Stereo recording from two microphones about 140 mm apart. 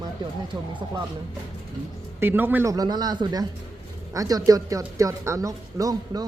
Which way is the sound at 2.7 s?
30° right (ahead or behind).